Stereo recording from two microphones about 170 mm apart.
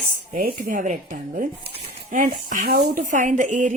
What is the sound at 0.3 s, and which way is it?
Speech, 55° right (ahead or behind).